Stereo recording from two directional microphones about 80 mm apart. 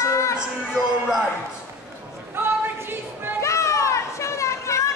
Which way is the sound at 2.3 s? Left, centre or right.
Right.